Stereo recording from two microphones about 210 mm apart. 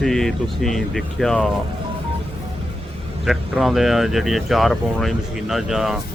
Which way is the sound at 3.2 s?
Centre (ahead or behind).